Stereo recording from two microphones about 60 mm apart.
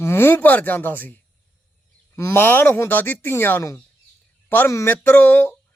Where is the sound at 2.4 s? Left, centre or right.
Left.